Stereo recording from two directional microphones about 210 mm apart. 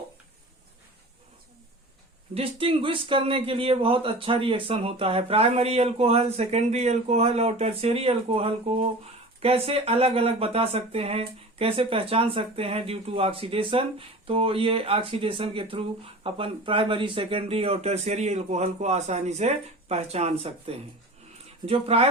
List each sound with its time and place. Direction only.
2.3 s speech: 25° right (ahead or behind)